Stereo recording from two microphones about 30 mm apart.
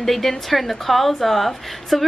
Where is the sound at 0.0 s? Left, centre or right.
Centre.